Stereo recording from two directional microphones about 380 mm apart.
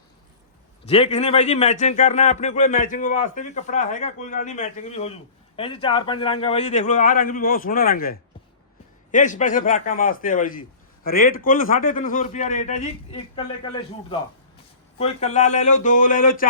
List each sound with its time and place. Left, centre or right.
0.9 s a man's voice: centre
9.1 s a man's voice: centre
14.9 s a man's voice: centre